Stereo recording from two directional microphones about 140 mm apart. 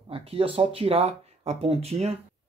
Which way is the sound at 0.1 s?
45° right (ahead or behind).